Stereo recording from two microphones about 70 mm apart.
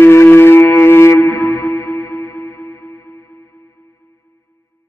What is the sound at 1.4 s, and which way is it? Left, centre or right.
Music, left.